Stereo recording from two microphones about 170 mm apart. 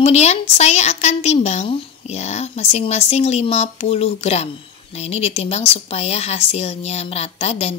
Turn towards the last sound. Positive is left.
turn(degrees=40)  # may be behind; listen again after turning